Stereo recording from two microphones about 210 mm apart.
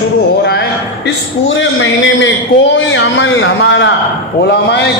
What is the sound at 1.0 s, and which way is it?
A man's voice, 65° left (ahead or behind).